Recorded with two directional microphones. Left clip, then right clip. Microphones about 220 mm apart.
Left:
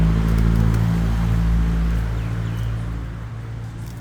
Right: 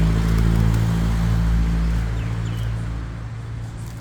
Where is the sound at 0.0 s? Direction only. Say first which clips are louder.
Left 1 dB; 50° right (ahead or behind).